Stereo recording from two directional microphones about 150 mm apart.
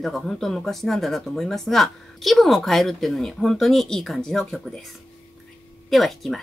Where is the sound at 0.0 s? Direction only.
Centre (ahead or behind).